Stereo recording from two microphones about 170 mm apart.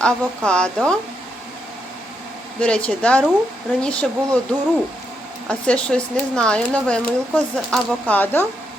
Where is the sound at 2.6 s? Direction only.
5° left (ahead or behind).